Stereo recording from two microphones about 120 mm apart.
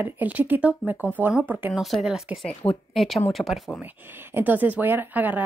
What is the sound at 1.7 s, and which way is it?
Speech, centre (ahead or behind).